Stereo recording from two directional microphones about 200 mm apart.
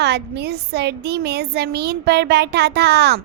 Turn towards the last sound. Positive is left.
turn(degrees=-55)  # may be behind; listen again after turning